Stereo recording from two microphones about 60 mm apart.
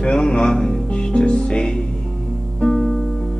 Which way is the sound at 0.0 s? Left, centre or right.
Centre.